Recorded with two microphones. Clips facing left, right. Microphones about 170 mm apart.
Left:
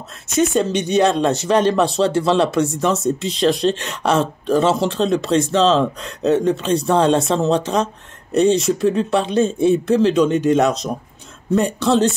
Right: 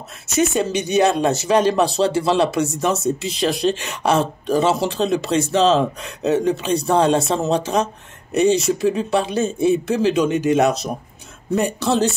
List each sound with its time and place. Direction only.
0.4 s speech: 5° right (ahead or behind)